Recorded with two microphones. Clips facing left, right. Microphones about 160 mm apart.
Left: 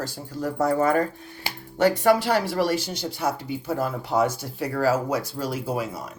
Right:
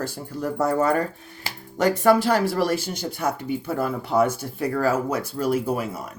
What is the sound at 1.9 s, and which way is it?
Speech, 45° right (ahead or behind).